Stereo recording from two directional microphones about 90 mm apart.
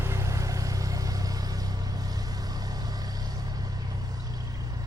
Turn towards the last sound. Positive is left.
turn(degrees=-45)  # may be behind; listen again after turning